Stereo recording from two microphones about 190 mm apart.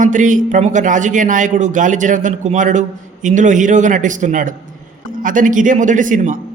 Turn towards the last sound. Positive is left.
turn(degrees=-45)  # may be behind; listen again after turning